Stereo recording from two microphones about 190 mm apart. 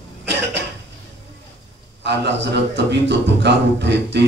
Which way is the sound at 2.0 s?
65° right (ahead or behind).